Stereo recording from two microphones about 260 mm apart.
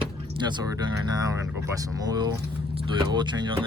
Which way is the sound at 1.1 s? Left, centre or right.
Centre.